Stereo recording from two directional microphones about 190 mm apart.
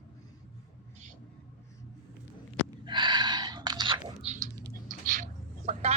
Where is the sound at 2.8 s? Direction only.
25° right (ahead or behind).